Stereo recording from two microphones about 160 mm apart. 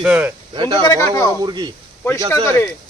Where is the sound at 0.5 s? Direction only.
30° right (ahead or behind).